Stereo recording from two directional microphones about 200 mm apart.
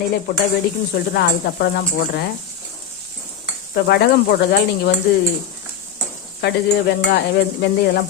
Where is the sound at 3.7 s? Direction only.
55° left (ahead or behind).